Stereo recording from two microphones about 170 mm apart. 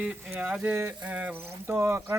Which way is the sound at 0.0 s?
10° right (ahead or behind).